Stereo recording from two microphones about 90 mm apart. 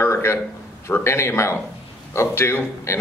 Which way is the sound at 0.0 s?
30° left (ahead or behind).